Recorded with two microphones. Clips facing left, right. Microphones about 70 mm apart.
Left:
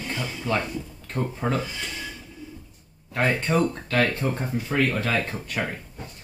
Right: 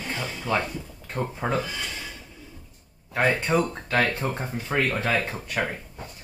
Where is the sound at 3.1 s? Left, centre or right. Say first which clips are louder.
Right 1 dB; centre.